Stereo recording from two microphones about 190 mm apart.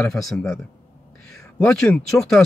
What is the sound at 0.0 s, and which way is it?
Speech, centre (ahead or behind).